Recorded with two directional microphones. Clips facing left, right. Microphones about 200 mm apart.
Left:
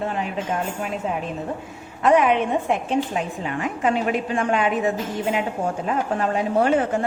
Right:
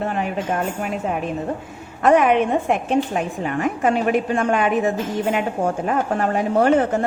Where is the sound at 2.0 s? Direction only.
50° right (ahead or behind).